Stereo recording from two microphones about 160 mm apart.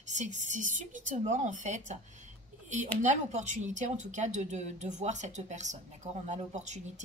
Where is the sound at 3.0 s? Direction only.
45° right (ahead or behind).